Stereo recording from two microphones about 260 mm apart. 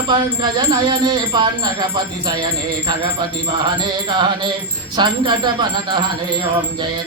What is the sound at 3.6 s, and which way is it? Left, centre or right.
Speech, centre.